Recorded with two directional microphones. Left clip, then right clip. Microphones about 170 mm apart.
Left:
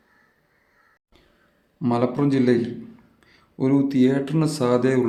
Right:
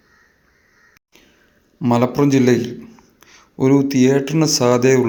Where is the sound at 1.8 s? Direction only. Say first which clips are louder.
Right 6 dB; 25° right (ahead or behind).